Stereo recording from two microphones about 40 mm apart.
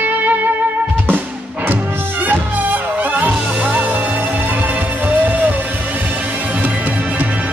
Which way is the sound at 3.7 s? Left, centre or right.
Right.